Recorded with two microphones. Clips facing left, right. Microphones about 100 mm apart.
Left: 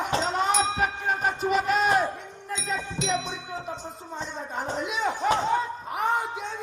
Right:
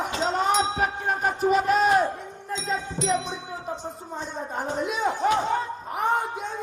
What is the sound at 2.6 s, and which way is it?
Music, 35° right (ahead or behind).